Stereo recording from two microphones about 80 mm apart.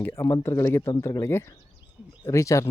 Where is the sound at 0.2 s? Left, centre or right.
Left.